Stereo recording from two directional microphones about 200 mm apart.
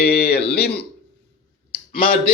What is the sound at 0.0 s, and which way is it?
Speech, 50° left (ahead or behind).